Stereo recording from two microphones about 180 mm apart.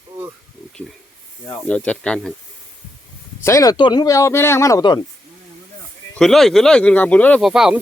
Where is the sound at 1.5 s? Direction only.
10° left (ahead or behind).